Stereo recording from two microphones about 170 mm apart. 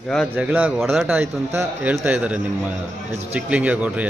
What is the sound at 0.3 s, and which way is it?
A man's voice, 10° right (ahead or behind).